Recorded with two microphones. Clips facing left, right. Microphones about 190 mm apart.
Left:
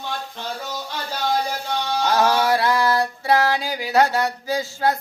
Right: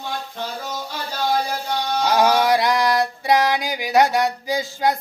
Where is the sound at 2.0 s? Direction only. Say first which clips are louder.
Right 2 dB; 15° right (ahead or behind).